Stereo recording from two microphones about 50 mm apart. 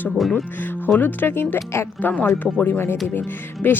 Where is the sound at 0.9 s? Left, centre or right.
Left.